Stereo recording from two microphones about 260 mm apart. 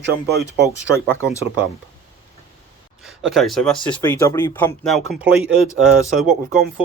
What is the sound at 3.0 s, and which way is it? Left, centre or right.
Speech, centre.